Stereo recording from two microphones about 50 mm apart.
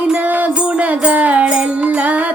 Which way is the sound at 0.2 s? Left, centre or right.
Right.